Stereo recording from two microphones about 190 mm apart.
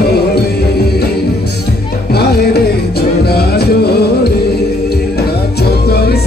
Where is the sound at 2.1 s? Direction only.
55° left (ahead or behind).